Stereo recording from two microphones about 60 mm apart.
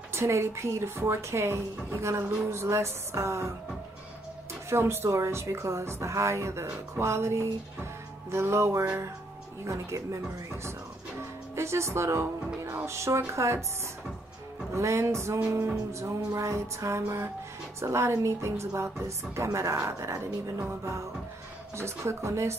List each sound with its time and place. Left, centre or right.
0.1 s speech: right
4.6 s speech: right
11.1 s music: right
12.8 s speech: right
14.7 s speech: right